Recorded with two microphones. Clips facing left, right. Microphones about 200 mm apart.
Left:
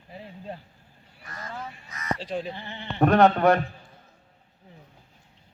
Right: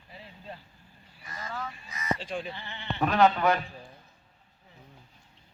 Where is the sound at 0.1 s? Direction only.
45° left (ahead or behind).